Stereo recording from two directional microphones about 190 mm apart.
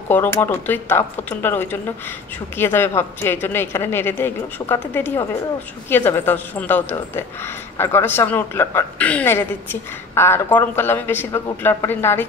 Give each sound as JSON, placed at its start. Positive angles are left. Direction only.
{"t": 0.1, "sound": "speech", "side_deg": 10}